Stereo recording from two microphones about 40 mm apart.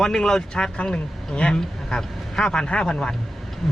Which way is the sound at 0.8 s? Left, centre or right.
Left.